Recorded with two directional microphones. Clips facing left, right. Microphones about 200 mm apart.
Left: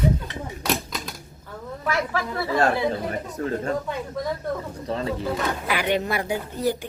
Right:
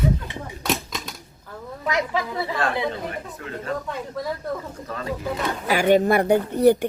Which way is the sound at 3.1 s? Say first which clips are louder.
Left 6 dB; 35° left (ahead or behind).